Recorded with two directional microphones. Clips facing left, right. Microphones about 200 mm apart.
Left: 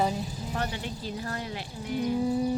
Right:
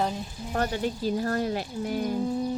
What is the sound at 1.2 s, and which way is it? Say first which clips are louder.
Speech: right 8 dB; 45° right (ahead or behind).